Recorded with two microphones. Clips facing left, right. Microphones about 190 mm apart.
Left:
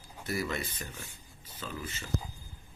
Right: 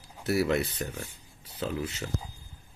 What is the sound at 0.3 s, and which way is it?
Speech, 70° right (ahead or behind).